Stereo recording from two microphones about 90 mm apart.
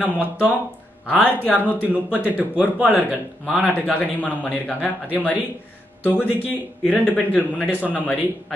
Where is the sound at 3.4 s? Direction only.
Centre (ahead or behind).